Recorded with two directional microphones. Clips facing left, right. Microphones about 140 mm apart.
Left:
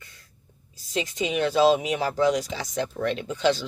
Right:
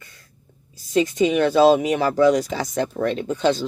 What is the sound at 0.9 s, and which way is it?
Speech, 45° right (ahead or behind).